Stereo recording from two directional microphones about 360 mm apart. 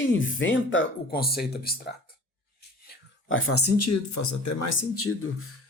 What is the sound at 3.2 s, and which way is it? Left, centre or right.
Speech, left.